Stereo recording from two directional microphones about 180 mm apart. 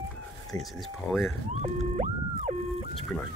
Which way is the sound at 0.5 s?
Centre (ahead or behind).